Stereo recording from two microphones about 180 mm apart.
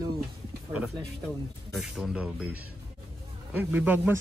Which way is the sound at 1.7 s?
Centre (ahead or behind).